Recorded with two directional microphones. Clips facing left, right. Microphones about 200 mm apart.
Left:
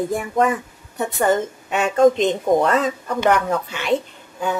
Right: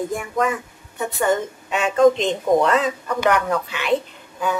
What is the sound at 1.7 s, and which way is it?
Speech, 55° left (ahead or behind).